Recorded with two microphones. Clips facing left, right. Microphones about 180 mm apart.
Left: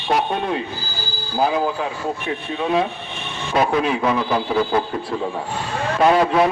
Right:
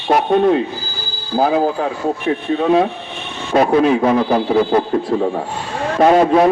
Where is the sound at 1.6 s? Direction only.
35° right (ahead or behind).